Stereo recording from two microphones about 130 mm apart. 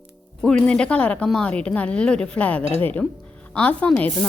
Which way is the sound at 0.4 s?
5° left (ahead or behind).